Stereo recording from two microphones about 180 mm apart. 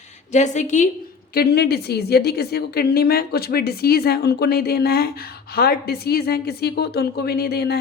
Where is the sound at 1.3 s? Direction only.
65° left (ahead or behind).